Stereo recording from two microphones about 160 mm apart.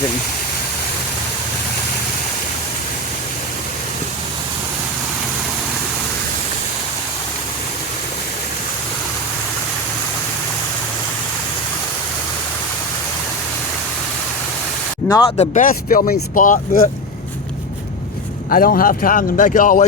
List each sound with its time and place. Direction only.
15.4 s speech: 55° left (ahead or behind)
18.5 s speech: 65° left (ahead or behind)